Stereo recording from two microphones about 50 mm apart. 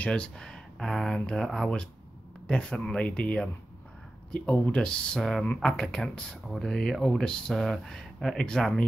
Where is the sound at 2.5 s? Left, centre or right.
Centre.